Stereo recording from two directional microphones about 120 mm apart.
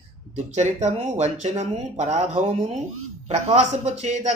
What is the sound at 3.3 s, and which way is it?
A woman's voice, 70° right (ahead or behind).